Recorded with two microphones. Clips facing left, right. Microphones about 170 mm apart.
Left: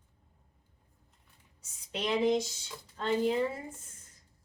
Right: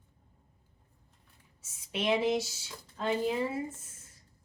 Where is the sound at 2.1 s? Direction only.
5° right (ahead or behind).